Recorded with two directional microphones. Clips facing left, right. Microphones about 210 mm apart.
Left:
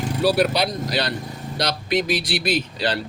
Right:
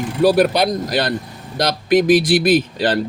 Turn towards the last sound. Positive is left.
turn(degrees=-50)  # may be behind; listen again after turning